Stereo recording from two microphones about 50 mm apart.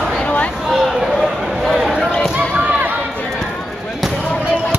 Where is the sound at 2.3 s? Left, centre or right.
Right.